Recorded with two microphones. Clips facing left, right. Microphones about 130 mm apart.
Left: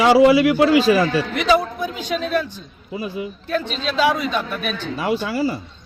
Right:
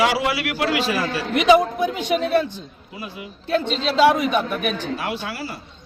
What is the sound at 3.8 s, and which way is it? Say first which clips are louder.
Speech: right 3 dB; 20° right (ahead or behind).